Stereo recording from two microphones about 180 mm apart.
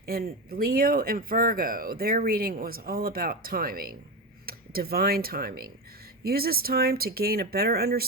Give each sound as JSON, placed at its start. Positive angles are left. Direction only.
{"t": 0.0, "sound": "speech", "side_deg": -55}